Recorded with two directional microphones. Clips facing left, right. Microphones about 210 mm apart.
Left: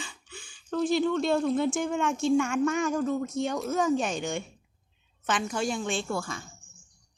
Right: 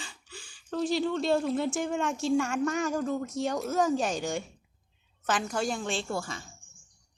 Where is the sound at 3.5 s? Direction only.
Centre (ahead or behind).